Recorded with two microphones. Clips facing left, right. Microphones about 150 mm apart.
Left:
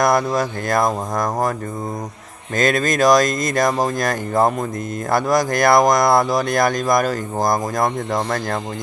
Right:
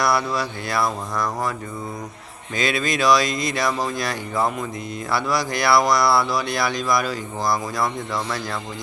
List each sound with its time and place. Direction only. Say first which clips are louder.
0.0 s speech: left 5 dB; 45° left (ahead or behind)
2.6 s speech: left 5 dB; 45° left (ahead or behind)